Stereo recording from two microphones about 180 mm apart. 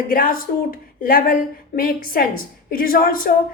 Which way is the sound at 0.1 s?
50° left (ahead or behind).